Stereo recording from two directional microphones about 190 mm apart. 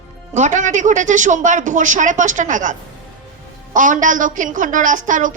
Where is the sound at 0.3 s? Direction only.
40° right (ahead or behind).